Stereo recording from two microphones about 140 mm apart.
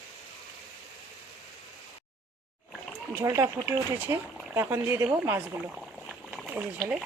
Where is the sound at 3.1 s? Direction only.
20° right (ahead or behind).